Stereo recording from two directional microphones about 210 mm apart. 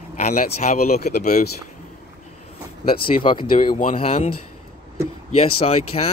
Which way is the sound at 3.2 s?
25° left (ahead or behind).